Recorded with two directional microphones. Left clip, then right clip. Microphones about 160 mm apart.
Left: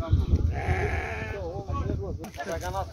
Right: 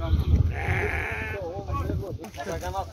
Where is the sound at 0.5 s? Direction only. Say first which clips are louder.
Right 2 dB; 90° left.